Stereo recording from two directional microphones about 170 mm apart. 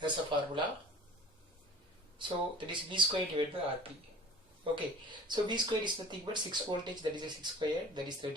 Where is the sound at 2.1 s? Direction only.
30° right (ahead or behind).